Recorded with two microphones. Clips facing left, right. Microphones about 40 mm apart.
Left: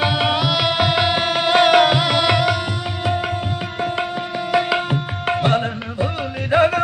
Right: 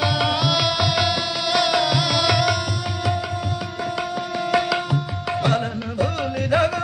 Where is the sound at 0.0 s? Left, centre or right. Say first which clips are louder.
Left 2 dB; left.